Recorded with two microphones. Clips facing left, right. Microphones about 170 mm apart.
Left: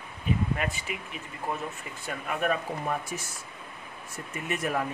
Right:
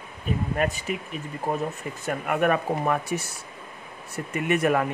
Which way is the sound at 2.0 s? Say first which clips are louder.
Right 6 dB; 60° right (ahead or behind).